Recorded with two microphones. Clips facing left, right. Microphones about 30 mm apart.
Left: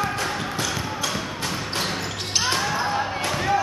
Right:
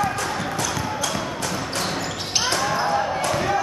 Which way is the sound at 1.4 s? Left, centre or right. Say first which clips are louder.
Right 1 dB; centre.